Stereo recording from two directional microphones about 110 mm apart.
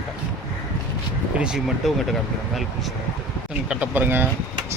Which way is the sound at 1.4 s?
5° right (ahead or behind).